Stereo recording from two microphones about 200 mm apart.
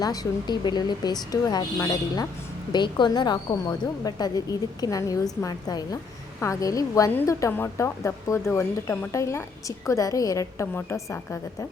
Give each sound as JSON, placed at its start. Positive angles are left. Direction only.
{"t": 0.0, "sound": "a woman's voice", "side_deg": 20}